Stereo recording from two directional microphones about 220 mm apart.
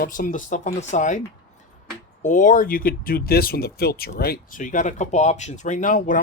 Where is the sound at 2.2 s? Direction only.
35° left (ahead or behind).